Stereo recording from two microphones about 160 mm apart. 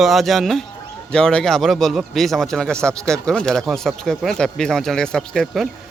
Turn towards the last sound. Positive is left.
turn(degrees=0)  # may be behind; listen again after turning